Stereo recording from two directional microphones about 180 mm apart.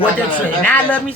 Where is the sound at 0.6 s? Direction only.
10° left (ahead or behind).